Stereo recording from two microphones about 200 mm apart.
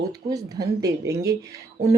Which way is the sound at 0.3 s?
15° right (ahead or behind).